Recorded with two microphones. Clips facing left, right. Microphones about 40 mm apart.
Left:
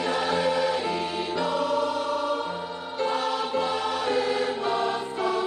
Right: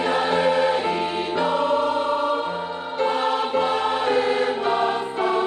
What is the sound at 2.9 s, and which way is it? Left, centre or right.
Choir, centre.